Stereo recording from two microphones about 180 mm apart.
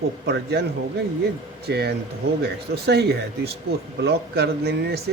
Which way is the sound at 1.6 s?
65° right (ahead or behind).